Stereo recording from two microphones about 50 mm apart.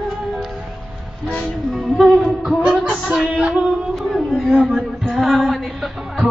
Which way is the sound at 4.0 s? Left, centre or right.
Centre.